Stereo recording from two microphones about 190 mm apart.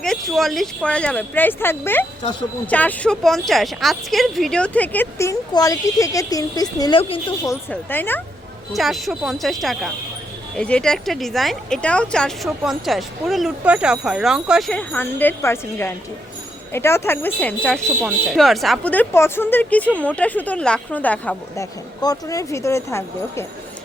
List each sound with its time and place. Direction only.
0.0 s a woman's voice: centre (ahead or behind); by 7.3 s 30° left (ahead or behind)
7.4 s speech: 10° left (ahead or behind)
8.7 s speech: centre (ahead or behind)